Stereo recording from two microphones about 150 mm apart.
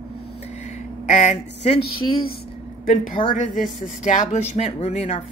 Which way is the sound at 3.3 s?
60° left (ahead or behind).